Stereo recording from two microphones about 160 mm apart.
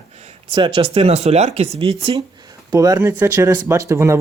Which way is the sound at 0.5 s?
30° right (ahead or behind).